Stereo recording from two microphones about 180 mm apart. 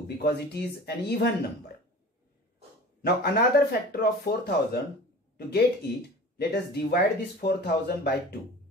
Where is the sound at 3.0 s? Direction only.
60° left (ahead or behind).